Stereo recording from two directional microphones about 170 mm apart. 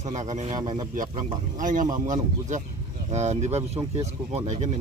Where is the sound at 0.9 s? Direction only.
50° right (ahead or behind).